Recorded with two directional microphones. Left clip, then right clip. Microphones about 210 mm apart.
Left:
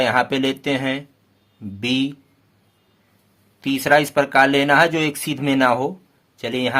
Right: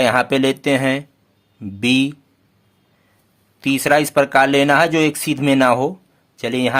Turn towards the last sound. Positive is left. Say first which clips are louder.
# right 3 dB
turn(degrees=-25)  # may be behind; listen again after turning